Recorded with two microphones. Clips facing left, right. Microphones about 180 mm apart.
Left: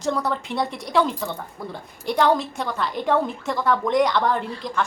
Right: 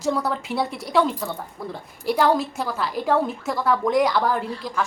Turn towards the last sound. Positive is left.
turn(degrees=-5)  # may be behind; listen again after turning